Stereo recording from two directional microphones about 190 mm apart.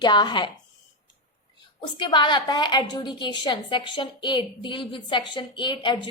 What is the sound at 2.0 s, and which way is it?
A woman's voice, 25° left (ahead or behind).